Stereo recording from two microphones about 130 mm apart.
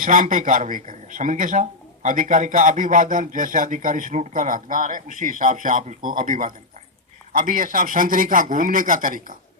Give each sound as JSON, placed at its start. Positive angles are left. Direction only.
{"t": 0.0, "sound": "speech", "side_deg": -90}